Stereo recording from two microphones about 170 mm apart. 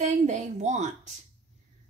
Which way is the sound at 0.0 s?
45° right (ahead or behind).